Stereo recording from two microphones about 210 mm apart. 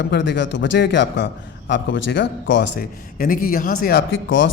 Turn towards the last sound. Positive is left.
turn(degrees=60)  # may be behind; listen again after turning